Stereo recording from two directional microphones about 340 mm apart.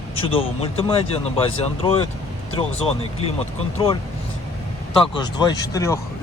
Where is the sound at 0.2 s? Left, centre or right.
Centre.